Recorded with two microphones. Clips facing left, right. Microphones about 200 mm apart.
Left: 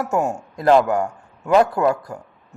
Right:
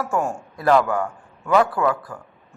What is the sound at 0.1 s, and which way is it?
Speech, 20° left (ahead or behind).